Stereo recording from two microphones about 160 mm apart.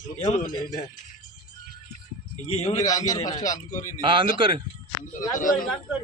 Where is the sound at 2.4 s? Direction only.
40° left (ahead or behind).